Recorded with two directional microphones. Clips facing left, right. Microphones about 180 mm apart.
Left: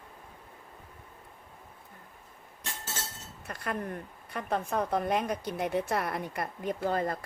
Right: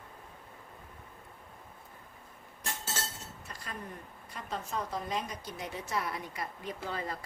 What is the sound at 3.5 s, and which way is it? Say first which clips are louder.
A woman's voice: left 10 dB; 60° left (ahead or behind).